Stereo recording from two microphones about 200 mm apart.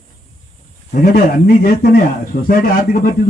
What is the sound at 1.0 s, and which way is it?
Speech, 50° left (ahead or behind).